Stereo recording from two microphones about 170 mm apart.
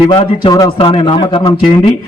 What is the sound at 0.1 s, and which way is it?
A man's voice, 25° left (ahead or behind).